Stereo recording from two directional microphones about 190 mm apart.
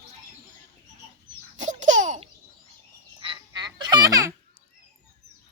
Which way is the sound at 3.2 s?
25° right (ahead or behind).